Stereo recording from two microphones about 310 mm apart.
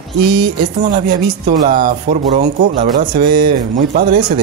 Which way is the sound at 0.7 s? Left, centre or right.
Right.